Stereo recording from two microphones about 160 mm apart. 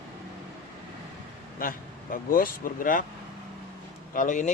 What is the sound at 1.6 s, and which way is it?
Speech, 60° left (ahead or behind).